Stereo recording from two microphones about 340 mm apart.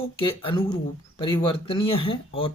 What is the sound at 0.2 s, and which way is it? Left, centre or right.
Speech, centre.